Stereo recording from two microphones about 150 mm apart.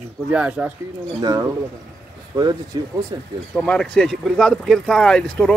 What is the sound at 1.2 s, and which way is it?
Speech, 25° right (ahead or behind).